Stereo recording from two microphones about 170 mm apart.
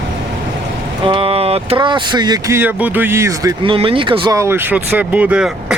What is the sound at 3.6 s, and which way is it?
Speech, 30° right (ahead or behind).